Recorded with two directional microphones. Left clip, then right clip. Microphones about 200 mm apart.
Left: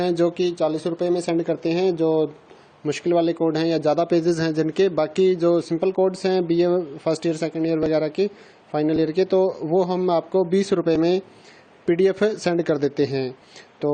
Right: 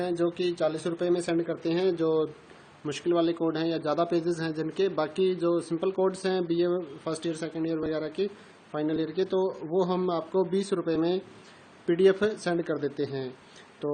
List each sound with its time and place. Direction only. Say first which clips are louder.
0.0 s a man's voice: left 7 dB; 40° left (ahead or behind)